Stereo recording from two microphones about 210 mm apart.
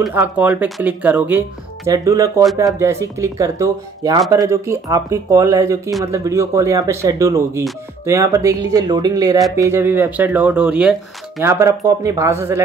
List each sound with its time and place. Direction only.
0.0 s speech: 10° right (ahead or behind)
11.3 s speech: 15° right (ahead or behind)